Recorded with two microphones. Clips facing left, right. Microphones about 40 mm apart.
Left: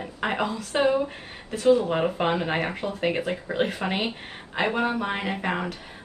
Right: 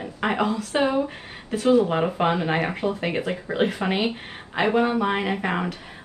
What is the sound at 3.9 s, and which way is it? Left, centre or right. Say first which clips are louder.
Speech: right 4 dB; right.